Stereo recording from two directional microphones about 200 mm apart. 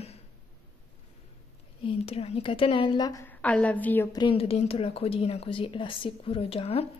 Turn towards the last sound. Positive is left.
turn(degrees=30)  # may be behind; listen again after turning